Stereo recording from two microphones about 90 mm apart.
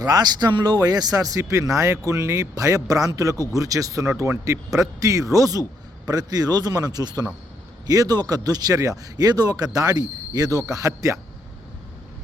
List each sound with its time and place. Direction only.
0.0 s speech: 45° right (ahead or behind)